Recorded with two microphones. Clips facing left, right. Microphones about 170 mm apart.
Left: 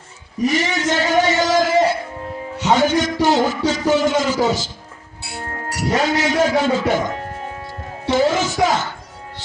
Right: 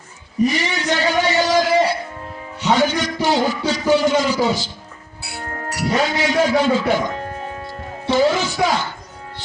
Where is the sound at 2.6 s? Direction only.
45° left (ahead or behind).